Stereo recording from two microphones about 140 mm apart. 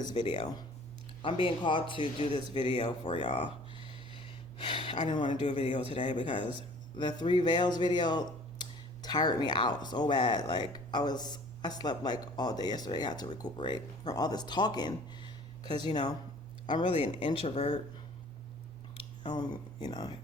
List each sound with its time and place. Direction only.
0.0 s speech: 35° left (ahead or behind)
4.1 s a sound: 40° left (ahead or behind)
5.0 s speech: 35° left (ahead or behind)
5.3 s a man's voice: 55° left (ahead or behind)
5.9 s speech: 35° left (ahead or behind)
19.2 s speech: 30° left (ahead or behind)